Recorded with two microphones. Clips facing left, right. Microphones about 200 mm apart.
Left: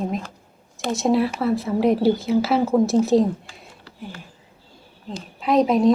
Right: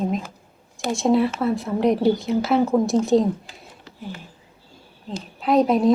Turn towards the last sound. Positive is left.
turn(degrees=0)  # may be behind; listen again after turning